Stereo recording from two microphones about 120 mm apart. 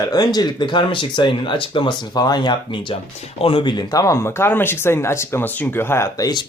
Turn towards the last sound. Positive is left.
turn(degrees=35)  # may be behind; listen again after turning